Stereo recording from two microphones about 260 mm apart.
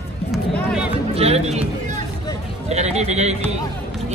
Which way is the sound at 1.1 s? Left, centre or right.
Right.